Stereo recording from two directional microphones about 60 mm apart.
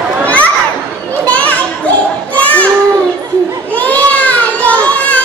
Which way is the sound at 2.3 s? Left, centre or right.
Left.